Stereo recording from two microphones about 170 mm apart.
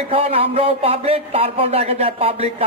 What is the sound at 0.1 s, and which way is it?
A man's voice, 35° right (ahead or behind).